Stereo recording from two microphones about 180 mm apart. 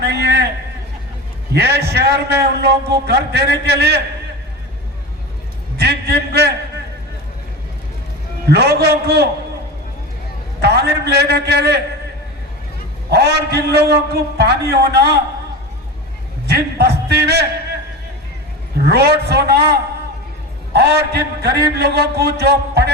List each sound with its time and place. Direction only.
0.0 s a sound: 65° right (ahead or behind)
1.5 s a man's voice: 65° right (ahead or behind)
5.7 s a man's voice: 65° right (ahead or behind)
8.4 s a man's voice: 60° right (ahead or behind)
10.6 s a man's voice: 65° right (ahead or behind)
13.1 s a man's voice: 65° right (ahead or behind)
16.5 s a man's voice: 60° right (ahead or behind)
18.9 s a man's voice: 60° right (ahead or behind)